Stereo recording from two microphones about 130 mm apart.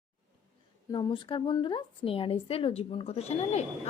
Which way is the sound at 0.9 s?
40° left (ahead or behind).